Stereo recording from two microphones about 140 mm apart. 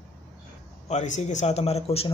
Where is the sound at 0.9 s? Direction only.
55° left (ahead or behind).